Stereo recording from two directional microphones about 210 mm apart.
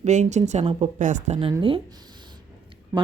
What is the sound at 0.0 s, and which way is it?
A woman's voice, 35° right (ahead or behind).